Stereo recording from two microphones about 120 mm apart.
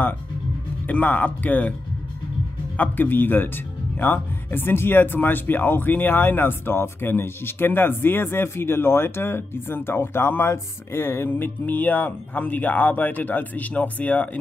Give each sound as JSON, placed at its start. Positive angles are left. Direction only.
{"t": 0.8, "sound": "speech", "side_deg": 15}
{"t": 2.8, "sound": "speech", "side_deg": 15}